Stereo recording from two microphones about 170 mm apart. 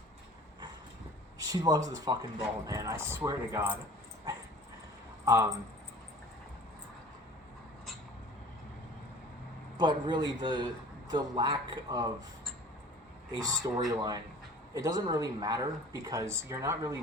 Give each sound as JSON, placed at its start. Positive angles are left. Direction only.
{"t": 1.4, "sound": "speech", "side_deg": -20}
{"t": 5.2, "sound": "speech", "side_deg": -15}
{"t": 9.7, "sound": "speech", "side_deg": -25}
{"t": 13.3, "sound": "speech", "side_deg": -25}